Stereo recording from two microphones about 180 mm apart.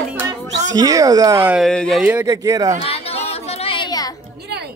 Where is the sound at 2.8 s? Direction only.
35° left (ahead or behind).